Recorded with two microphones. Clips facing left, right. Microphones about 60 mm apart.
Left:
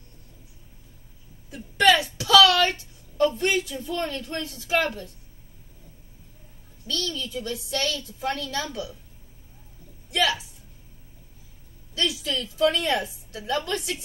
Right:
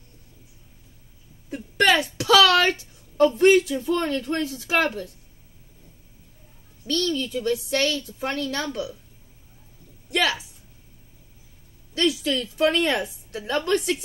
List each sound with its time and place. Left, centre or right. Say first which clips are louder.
1.5 s speech: even; right
3.2 s speech: right 6 dB; right
7.1 s a woman's voice: right 7 dB; right
11.9 s a woman's voice: right 5 dB; right